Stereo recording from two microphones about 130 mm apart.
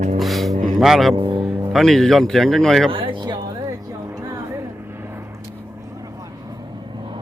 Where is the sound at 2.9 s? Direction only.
40° right (ahead or behind).